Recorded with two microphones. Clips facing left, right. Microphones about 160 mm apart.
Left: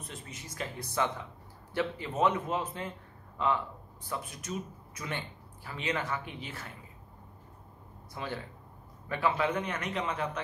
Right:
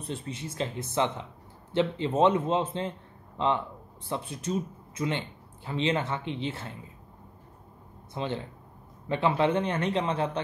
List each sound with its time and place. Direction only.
0.0 s a man's voice: 30° right (ahead or behind)
8.1 s a man's voice: 25° right (ahead or behind)